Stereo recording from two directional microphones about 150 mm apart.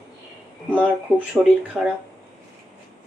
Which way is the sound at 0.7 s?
10° right (ahead or behind).